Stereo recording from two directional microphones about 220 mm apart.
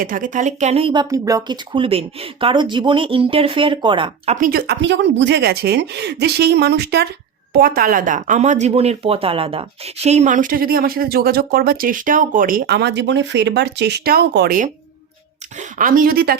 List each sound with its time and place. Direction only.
0.0 s speech: 40° right (ahead or behind); by 4.4 s 20° right (ahead or behind)
4.4 s speech: 40° right (ahead or behind)